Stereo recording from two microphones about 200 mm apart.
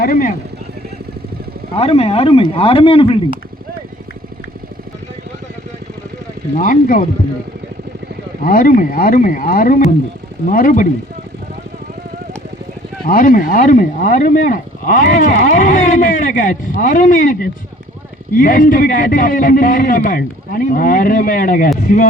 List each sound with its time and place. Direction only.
0.0 s a man's voice: 45° left (ahead or behind)
1.7 s speech: 30° left (ahead or behind)
6.6 s a man's voice: 45° left (ahead or behind)
8.4 s a man's voice: 45° left (ahead or behind)
13.1 s a man's voice: 45° left (ahead or behind)